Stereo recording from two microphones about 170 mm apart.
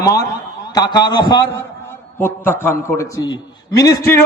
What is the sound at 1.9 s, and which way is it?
A man's voice, 15° left (ahead or behind).